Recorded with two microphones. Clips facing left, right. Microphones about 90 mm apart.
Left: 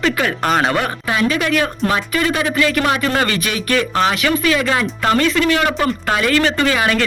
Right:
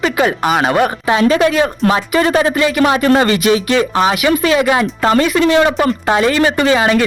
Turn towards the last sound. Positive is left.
turn(degrees=-25)  # may be behind; listen again after turning